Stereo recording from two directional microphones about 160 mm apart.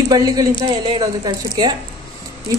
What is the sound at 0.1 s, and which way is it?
Speech, 25° right (ahead or behind).